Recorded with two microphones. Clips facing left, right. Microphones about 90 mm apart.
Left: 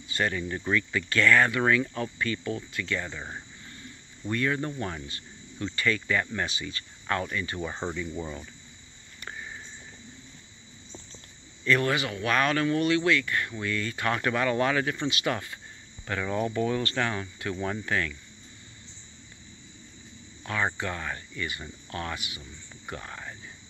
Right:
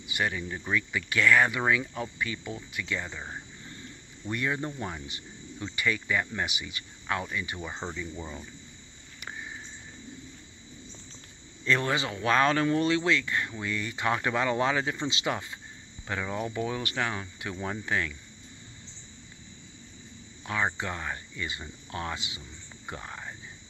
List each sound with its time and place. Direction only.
0.0 s cricket: 15° right (ahead or behind)
4.3 s cricket: 15° right (ahead or behind)
7.6 s speech: centre (ahead or behind)
9.2 s a sound: 5° right (ahead or behind)
11.6 s speech: 25° right (ahead or behind)
16.1 s cricket: 15° right (ahead or behind)
20.4 s speech: 15° right (ahead or behind)